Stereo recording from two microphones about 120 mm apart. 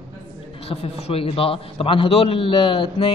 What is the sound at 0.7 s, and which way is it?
A man's voice, 55° left (ahead or behind).